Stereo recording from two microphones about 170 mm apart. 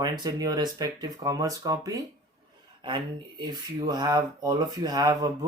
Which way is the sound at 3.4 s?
25° right (ahead or behind).